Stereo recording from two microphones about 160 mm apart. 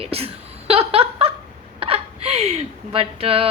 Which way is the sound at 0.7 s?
40° right (ahead or behind).